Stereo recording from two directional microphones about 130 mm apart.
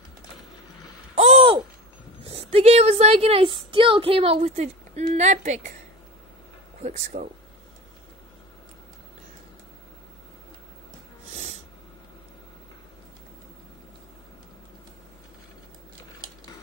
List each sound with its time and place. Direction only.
1.1 s a sound: 50° right (ahead or behind)
2.2 s speech: 50° right (ahead or behind)
6.8 s speech: 65° right (ahead or behind)